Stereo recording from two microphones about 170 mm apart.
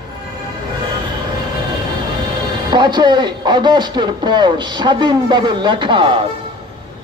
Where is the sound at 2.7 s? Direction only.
25° right (ahead or behind).